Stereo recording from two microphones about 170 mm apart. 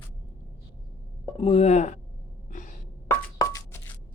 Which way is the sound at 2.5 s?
50° left (ahead or behind).